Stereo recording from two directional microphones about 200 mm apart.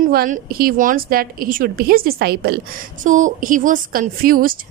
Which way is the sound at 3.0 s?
40° right (ahead or behind).